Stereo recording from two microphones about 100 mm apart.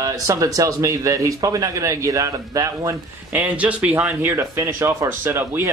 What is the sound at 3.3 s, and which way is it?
Speech, 15° right (ahead or behind).